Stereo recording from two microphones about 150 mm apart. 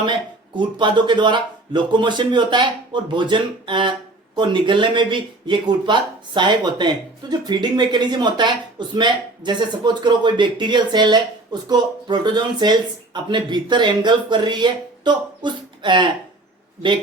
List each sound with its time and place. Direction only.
0.0 s speech: 30° right (ahead or behind)